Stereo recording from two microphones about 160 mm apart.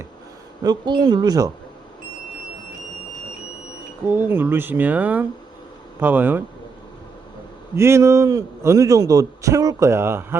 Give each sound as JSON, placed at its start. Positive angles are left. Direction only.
{"t": 0.6, "sound": "speech", "side_deg": -25}
{"t": 4.0, "sound": "a man's voice", "side_deg": -15}
{"t": 7.8, "sound": "a man's voice", "side_deg": -15}